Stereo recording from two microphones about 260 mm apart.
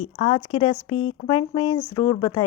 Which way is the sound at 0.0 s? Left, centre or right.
Left.